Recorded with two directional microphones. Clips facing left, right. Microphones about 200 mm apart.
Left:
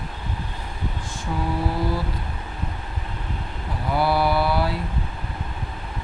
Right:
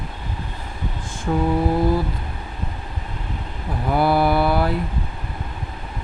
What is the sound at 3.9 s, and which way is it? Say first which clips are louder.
Mantra: right 3 dB; 50° right (ahead or behind).